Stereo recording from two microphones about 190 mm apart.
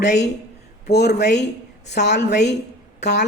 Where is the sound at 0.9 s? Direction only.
60° left (ahead or behind).